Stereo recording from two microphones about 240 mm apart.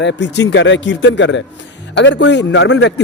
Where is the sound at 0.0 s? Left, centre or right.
Left.